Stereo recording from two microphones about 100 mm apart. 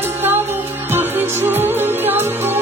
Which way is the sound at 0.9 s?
20° right (ahead or behind).